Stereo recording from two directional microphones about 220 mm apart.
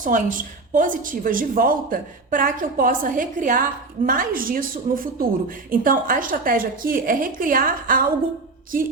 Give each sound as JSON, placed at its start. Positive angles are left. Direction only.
{"t": 0.0, "sound": "a woman's voice", "side_deg": -35}